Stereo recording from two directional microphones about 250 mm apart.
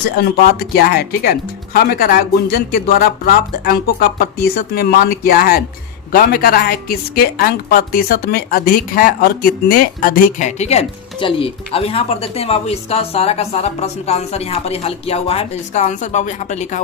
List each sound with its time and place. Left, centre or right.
0.2 s a woman's voice: left